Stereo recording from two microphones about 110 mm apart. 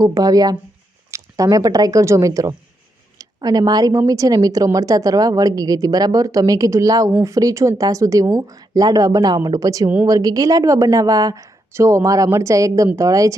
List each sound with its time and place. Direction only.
0.0 s a woman's voice: 35° right (ahead or behind)